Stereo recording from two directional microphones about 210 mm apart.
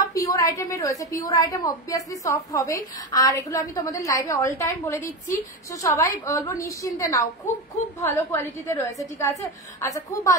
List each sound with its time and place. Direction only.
0.0 s a woman's voice: 15° left (ahead or behind)